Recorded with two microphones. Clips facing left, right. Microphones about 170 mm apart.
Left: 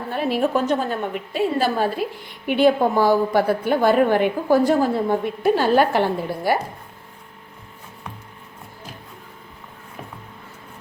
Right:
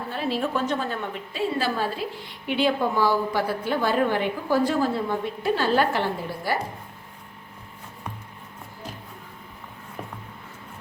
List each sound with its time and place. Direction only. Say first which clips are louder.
0.3 s a woman's voice: left 6 dB; 45° left (ahead or behind)